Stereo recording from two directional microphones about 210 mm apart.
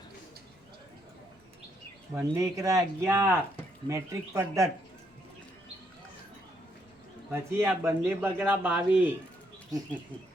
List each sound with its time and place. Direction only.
2.1 s speech: 15° right (ahead or behind)
7.3 s speech: 10° right (ahead or behind)